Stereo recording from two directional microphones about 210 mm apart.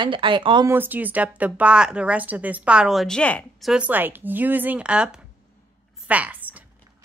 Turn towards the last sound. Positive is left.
turn(degrees=-10)  # may be behind; listen again after turning